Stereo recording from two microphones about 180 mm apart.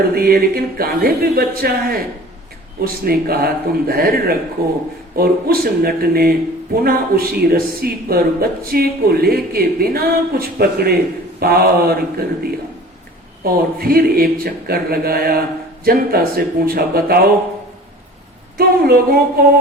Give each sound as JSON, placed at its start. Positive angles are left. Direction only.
{"t": 0.1, "sound": "a man's voice", "side_deg": -55}
{"t": 18.5, "sound": "a man's voice", "side_deg": -55}